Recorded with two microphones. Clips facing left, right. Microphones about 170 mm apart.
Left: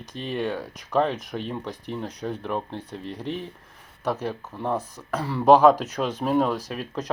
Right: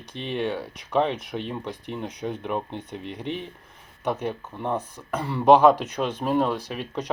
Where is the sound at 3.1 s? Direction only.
35° left (ahead or behind).